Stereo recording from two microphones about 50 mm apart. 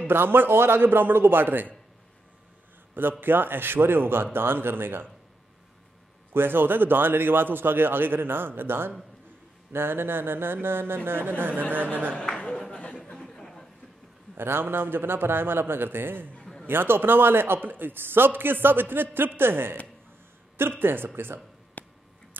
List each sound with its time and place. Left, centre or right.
0.0 s a man's voice: right
2.9 s a man's voice: right
6.3 s a man's voice: right
12.4 s a sound: left
14.3 s a man's voice: right
20.8 s a man's voice: right
21.8 s a sound: left